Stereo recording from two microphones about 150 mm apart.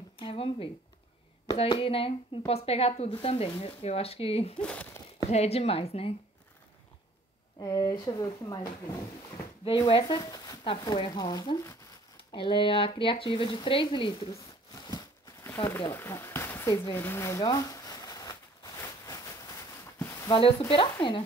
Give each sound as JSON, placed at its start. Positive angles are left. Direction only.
{"t": 0.2, "sound": "a sound", "side_deg": 35}
{"t": 1.6, "sound": "speech", "side_deg": 40}
{"t": 4.6, "sound": "speech", "side_deg": 5}
{"t": 5.3, "sound": "a woman's voice", "side_deg": 45}
{"t": 7.5, "sound": "speech", "side_deg": 25}
{"t": 9.7, "sound": "speech", "side_deg": 35}
{"t": 12.3, "sound": "speech", "side_deg": 35}
{"t": 14.3, "sound": "a sound", "side_deg": 25}
{"t": 15.4, "sound": "speech", "side_deg": 15}
{"t": 15.9, "sound": "a sound", "side_deg": 15}
{"t": 20.2, "sound": "speech", "side_deg": 35}